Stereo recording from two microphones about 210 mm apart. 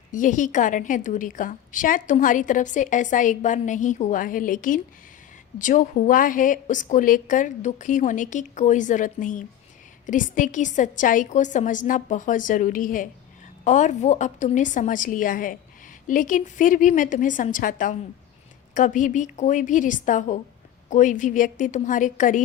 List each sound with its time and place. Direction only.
0.1 s a woman's voice: 40° left (ahead or behind)